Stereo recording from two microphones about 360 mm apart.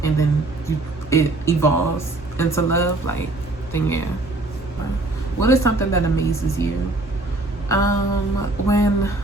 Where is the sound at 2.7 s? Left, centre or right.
Left.